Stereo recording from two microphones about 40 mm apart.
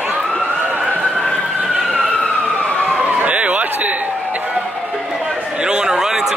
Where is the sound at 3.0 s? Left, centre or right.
Right.